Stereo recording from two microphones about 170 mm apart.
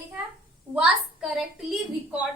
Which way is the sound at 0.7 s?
5° right (ahead or behind).